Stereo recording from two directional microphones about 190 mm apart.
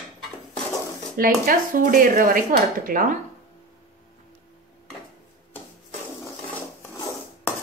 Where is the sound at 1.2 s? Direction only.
50° right (ahead or behind).